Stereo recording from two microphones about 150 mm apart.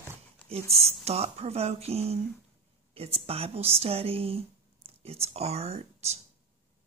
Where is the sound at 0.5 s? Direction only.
45° right (ahead or behind).